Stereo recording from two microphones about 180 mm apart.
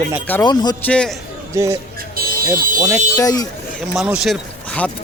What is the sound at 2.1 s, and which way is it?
Buzzer, 55° right (ahead or behind).